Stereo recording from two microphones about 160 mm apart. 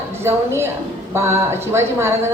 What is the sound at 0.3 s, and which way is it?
A woman's voice, 15° right (ahead or behind).